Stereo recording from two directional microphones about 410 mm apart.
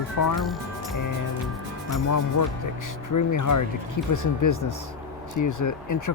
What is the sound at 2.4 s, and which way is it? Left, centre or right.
Speech, left.